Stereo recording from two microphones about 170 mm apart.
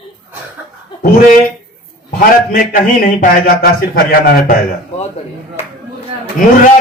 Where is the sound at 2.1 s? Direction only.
55° left (ahead or behind).